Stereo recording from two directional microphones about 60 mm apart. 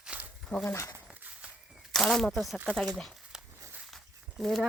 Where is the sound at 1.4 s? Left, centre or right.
Centre.